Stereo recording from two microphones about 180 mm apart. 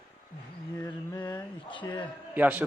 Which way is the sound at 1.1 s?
25° left (ahead or behind).